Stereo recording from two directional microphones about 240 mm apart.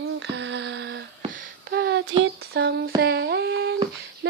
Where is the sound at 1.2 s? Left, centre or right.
Right.